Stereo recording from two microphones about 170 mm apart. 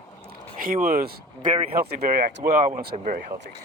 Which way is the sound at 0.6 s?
55° right (ahead or behind).